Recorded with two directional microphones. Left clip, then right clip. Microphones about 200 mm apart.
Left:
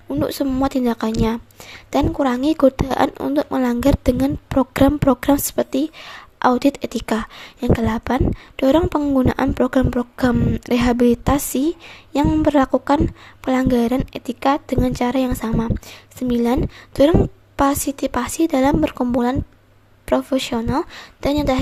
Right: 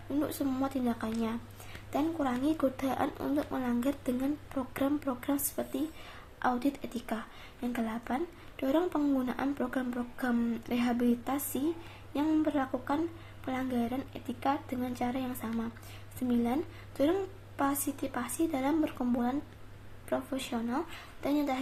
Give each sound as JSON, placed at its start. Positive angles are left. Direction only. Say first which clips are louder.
{"t": 0.1, "sound": "a woman's voice", "louder": "left 12 dB", "side_deg": 45}